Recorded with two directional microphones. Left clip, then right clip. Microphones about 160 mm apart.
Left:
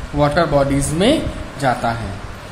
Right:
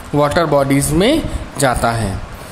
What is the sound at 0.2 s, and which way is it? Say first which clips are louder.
Speech: right 1 dB; 40° right (ahead or behind).